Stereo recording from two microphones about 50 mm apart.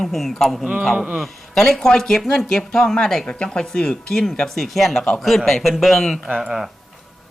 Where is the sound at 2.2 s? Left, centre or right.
Centre.